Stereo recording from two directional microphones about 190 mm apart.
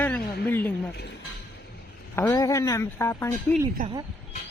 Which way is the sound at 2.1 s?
15° left (ahead or behind).